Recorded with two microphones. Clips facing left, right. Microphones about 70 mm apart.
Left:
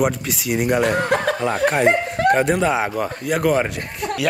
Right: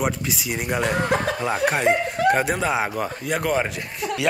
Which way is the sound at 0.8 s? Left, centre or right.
Left.